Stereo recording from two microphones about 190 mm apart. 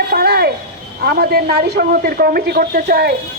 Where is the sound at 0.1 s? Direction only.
55° right (ahead or behind).